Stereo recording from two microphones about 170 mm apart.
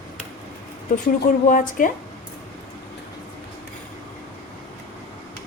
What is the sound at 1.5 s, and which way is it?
Speech, 50° left (ahead or behind).